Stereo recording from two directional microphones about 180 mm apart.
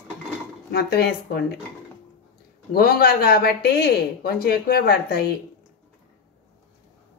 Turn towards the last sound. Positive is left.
turn(degrees=60)  # may be behind; listen again after turning